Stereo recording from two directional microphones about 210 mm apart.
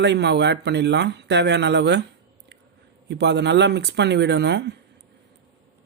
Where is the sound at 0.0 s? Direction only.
55° right (ahead or behind).